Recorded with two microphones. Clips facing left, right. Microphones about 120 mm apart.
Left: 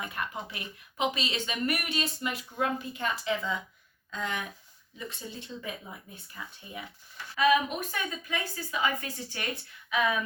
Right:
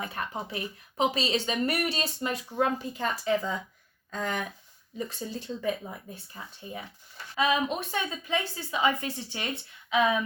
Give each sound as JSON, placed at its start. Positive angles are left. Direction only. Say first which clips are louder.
{"t": 0.0, "sound": "a woman's voice", "louder": "right 2 dB", "side_deg": -30}